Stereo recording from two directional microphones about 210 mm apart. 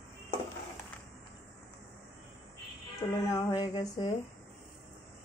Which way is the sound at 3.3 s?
15° left (ahead or behind).